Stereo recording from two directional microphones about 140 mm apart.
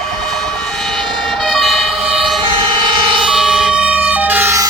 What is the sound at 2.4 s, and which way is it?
Emergency vehicle, 35° right (ahead or behind).